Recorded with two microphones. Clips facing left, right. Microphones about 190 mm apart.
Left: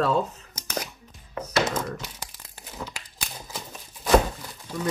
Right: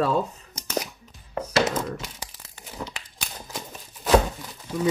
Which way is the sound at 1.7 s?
Centre (ahead or behind).